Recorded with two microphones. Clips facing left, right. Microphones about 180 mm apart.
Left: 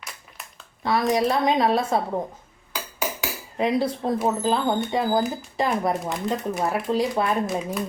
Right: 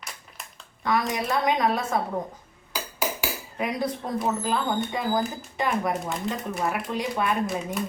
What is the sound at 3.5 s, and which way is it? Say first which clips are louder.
Speech: left 6 dB; 30° left (ahead or behind).